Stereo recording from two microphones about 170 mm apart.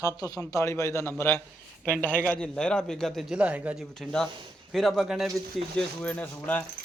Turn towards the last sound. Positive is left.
turn(degrees=10)  # may be behind; listen again after turning